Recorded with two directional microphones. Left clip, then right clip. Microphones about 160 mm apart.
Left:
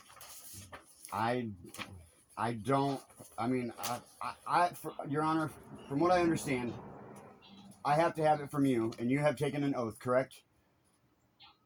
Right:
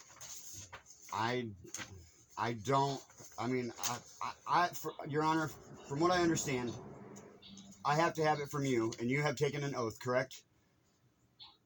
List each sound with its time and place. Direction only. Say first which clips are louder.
0.7 s a sound: left 2 dB; 40° left (ahead or behind)
3.0 s pigeon: left 3 dB; 40° left (ahead or behind)
3.5 s speech: right 1 dB; 20° left (ahead or behind)
7.9 s speech: left 3 dB; 20° left (ahead or behind)